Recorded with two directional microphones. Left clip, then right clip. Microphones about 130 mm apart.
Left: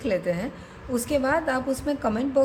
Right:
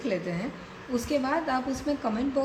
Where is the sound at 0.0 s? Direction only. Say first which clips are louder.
Left 5 dB; 55° left (ahead or behind).